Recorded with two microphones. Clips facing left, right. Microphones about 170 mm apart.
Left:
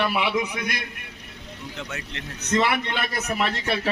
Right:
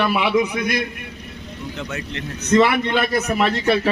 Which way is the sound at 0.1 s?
80° right.